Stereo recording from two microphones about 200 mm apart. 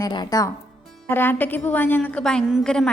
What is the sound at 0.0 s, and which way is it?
A woman's voice, 20° left (ahead or behind).